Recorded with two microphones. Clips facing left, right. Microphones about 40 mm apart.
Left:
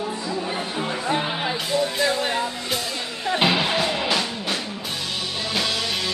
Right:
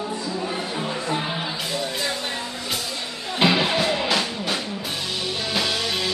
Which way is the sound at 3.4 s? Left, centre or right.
Centre.